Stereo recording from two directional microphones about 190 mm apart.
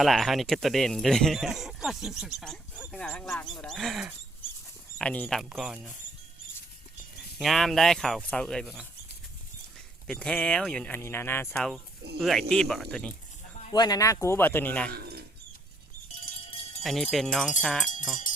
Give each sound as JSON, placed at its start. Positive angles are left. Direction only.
{"t": 0.0, "sound": "speech", "side_deg": 0}
{"t": 7.2, "sound": "speech", "side_deg": 0}
{"t": 10.1, "sound": "speech", "side_deg": 5}
{"t": 13.6, "sound": "speech", "side_deg": 25}
{"t": 16.8, "sound": "speech", "side_deg": 0}